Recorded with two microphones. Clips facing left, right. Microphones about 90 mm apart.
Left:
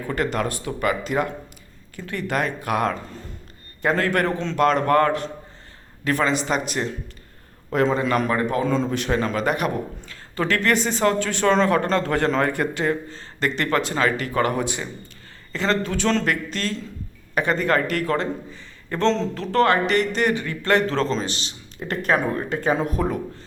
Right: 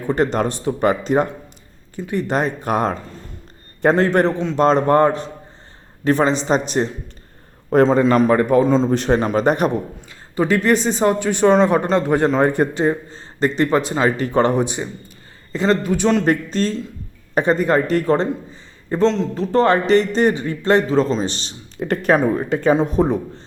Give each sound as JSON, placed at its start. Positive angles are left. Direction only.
{"t": 0.1, "sound": "speech", "side_deg": -30}
{"t": 2.0, "sound": "speech", "side_deg": -20}
{"t": 10.1, "sound": "speech", "side_deg": -15}
{"t": 16.2, "sound": "a man's voice", "side_deg": -25}
{"t": 21.2, "sound": "speech", "side_deg": -35}
{"t": 22.6, "sound": "speech", "side_deg": -25}